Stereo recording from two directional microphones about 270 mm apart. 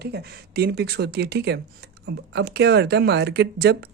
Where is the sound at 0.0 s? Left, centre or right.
Right.